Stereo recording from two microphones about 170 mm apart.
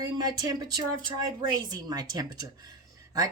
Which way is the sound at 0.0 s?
25° right (ahead or behind).